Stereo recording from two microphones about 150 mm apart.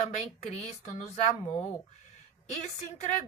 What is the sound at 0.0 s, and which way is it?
Speech, 50° left (ahead or behind).